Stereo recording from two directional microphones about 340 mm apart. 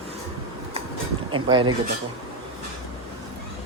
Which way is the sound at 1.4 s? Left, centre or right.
Centre.